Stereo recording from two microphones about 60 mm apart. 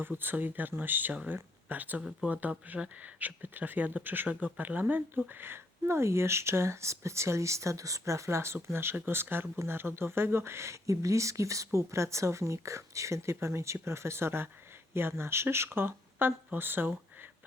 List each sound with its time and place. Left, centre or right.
0.2 s speech: right
5.4 s speech: right